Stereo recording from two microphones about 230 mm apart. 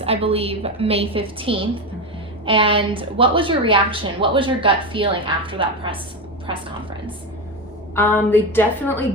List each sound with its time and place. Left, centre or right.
0.0 s a woman's voice: right
7.9 s a woman's voice: centre